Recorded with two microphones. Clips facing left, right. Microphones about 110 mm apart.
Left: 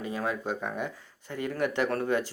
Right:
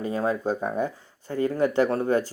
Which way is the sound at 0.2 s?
35° right (ahead or behind).